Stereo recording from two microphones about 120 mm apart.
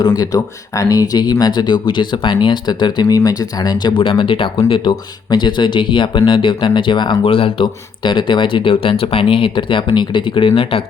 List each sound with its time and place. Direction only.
0.0 s speech: 30° left (ahead or behind); by 10.8 s 50° left (ahead or behind)